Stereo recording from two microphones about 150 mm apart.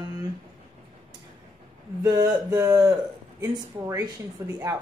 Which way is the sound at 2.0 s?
25° right (ahead or behind).